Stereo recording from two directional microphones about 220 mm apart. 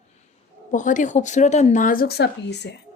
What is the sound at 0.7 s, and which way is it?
A woman's voice, 35° left (ahead or behind).